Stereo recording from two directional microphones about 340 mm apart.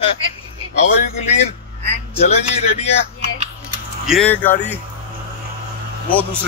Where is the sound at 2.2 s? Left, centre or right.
Centre.